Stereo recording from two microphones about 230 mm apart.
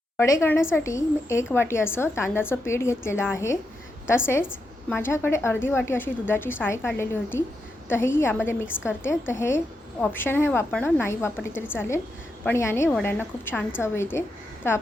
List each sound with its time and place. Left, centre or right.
0.2 s a woman's voice: centre
4.9 s a woman's voice: centre